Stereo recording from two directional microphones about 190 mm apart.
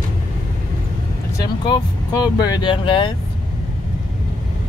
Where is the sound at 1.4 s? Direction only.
20° left (ahead or behind).